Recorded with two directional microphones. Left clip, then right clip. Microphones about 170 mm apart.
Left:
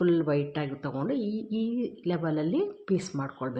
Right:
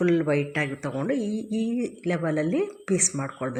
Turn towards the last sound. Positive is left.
turn(degrees=-20)  # may be behind; listen again after turning